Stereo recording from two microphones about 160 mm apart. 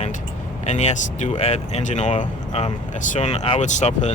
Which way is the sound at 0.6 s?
45° left (ahead or behind).